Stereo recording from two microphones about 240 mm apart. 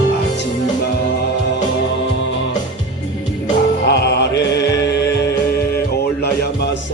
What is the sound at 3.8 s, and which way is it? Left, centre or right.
Music, left.